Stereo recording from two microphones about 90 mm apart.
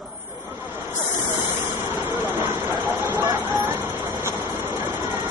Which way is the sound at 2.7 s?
50° right (ahead or behind).